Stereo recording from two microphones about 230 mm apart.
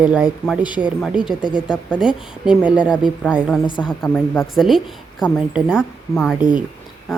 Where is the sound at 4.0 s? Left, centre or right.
Centre.